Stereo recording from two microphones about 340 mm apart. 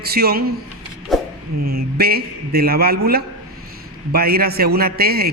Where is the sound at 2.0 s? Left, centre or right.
Right.